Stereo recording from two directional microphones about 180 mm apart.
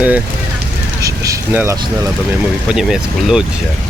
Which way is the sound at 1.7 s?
20° right (ahead or behind).